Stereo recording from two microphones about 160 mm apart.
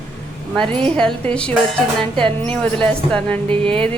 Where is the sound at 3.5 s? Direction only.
35° right (ahead or behind).